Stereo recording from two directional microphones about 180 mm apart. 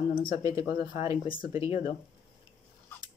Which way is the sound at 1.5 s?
15° right (ahead or behind).